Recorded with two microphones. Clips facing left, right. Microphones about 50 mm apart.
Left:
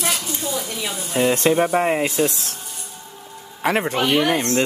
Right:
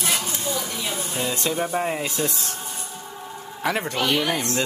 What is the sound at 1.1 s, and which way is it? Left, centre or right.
Speech, left.